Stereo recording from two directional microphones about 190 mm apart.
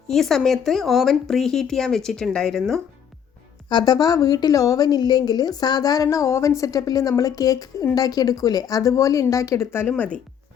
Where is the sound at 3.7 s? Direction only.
20° left (ahead or behind).